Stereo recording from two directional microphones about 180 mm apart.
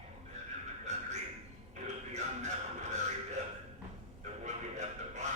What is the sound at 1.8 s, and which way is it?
Music, 40° right (ahead or behind).